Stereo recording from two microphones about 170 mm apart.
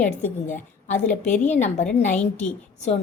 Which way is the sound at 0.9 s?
45° left (ahead or behind).